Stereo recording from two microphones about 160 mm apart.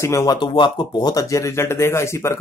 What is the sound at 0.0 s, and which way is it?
Speech, 20° left (ahead or behind).